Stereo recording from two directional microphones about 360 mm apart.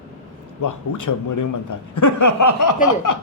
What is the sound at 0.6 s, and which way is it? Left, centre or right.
A man's voice, left.